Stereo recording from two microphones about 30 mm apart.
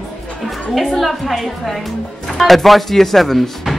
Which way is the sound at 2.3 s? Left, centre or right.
Centre.